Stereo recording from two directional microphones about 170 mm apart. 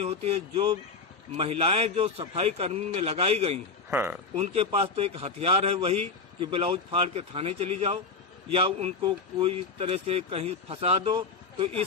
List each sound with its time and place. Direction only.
0.0 s speech: 40° right (ahead or behind)
3.8 s speech: 10° right (ahead or behind)
4.4 s speech: 35° right (ahead or behind)